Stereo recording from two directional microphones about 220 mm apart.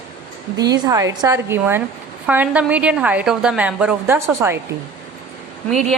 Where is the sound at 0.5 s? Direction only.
15° right (ahead or behind).